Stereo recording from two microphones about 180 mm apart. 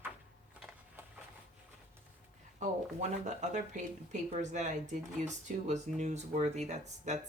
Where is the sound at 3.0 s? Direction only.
40° right (ahead or behind).